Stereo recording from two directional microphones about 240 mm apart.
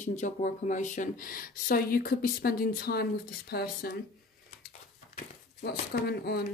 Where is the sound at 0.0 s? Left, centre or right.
Left.